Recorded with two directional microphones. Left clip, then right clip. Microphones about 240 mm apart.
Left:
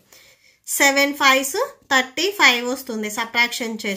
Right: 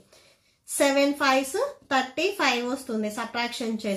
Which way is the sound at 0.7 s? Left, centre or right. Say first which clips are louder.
Left 5 dB; left.